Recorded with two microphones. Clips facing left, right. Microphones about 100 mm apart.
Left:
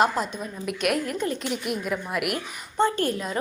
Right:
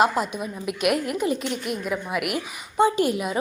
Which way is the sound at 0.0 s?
5° right (ahead or behind).